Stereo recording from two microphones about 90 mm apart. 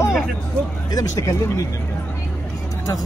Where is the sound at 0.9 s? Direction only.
40° left (ahead or behind).